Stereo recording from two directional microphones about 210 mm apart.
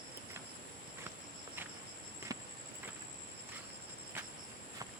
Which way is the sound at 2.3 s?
15° right (ahead or behind).